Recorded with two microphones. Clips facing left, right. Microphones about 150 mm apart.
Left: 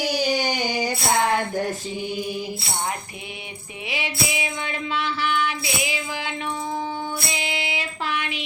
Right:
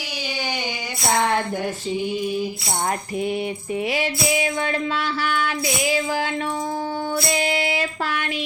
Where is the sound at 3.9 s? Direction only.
45° right (ahead or behind).